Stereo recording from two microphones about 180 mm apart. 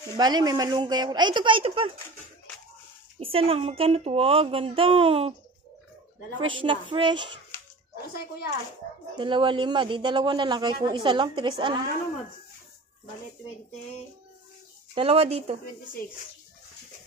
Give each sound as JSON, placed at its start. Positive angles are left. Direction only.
{"t": 0.2, "sound": "a man's voice", "side_deg": -20}
{"t": 3.2, "sound": "a woman's voice", "side_deg": -30}
{"t": 6.4, "sound": "a man's voice", "side_deg": -25}
{"t": 9.1, "sound": "a man's voice", "side_deg": -25}
{"t": 15.0, "sound": "a woman's voice", "side_deg": -35}